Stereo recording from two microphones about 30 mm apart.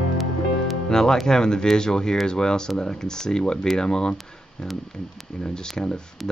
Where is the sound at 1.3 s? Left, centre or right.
Left.